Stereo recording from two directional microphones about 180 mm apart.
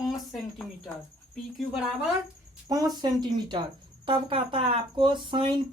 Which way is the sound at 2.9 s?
25° right (ahead or behind).